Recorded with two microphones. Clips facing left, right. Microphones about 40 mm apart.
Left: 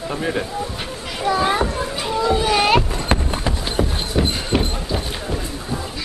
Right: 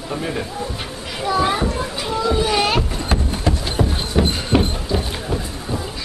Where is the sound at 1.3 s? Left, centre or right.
Left.